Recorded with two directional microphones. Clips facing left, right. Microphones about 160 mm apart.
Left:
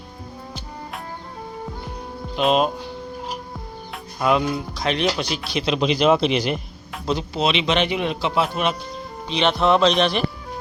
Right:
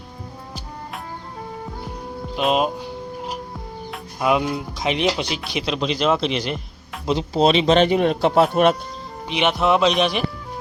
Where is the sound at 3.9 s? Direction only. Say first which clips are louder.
Even; 10° right (ahead or behind).